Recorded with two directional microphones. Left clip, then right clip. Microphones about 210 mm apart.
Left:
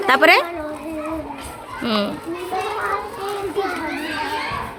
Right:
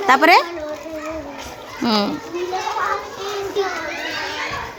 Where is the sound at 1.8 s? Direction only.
30° right (ahead or behind).